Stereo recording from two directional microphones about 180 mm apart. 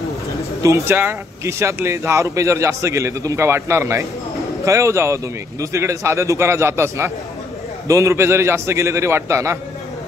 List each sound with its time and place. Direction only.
0.6 s speech: 15° right (ahead or behind)